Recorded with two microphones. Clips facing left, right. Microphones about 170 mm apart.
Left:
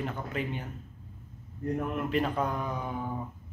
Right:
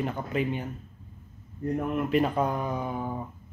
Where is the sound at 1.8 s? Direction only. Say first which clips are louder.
Right 5 dB; 10° right (ahead or behind).